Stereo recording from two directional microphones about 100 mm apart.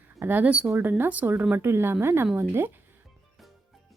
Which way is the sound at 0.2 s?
20° right (ahead or behind).